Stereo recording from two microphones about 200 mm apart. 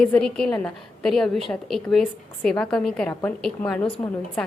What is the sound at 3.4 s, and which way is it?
Speech, 5° left (ahead or behind).